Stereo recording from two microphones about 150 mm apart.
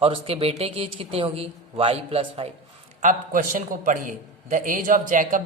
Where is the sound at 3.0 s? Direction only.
60° right (ahead or behind).